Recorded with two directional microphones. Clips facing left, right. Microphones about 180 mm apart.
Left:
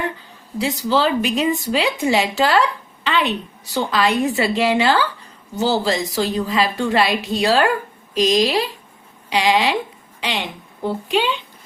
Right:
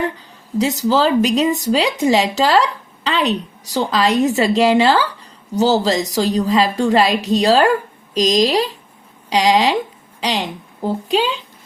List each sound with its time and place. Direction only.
0.6 s a woman's voice: 40° right (ahead or behind)